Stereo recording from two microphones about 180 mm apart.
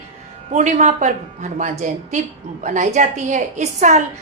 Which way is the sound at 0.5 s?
40° right (ahead or behind).